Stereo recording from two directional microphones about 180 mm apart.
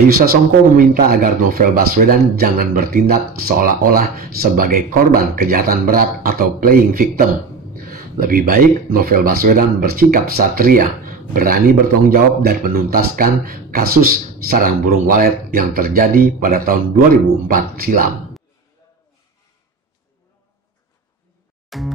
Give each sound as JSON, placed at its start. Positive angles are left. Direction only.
{"t": 0.2, "sound": "speech", "side_deg": -55}
{"t": 21.6, "sound": "music", "side_deg": 0}